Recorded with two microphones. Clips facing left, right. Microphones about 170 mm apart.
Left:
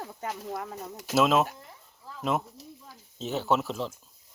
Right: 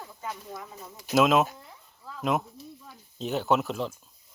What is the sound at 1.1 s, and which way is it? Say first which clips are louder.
Speech: right 2 dB; centre (ahead or behind).